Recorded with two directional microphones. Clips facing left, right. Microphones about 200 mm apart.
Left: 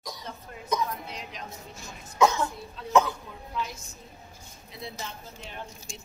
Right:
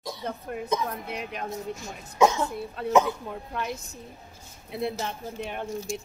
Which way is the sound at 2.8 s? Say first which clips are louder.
Right 2 dB; 60° right (ahead or behind).